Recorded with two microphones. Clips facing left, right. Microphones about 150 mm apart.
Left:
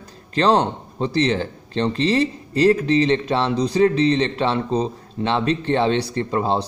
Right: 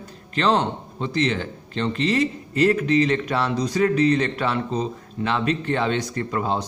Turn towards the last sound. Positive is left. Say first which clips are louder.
# left 4 dB
turn(degrees=30)  # may be behind; listen again after turning